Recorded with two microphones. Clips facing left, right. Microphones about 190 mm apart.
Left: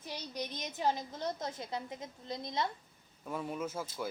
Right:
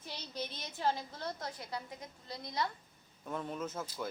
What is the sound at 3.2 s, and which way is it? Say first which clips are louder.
Speech: left 1 dB; 5° left (ahead or behind).